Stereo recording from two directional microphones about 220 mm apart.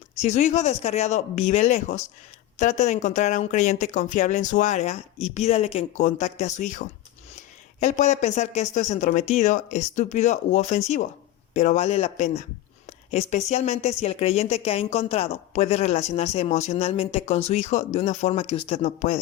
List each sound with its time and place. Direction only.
0.2 s speech: 30° left (ahead or behind)